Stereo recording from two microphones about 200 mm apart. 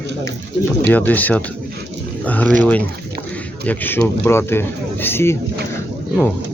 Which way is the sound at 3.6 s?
10° left (ahead or behind).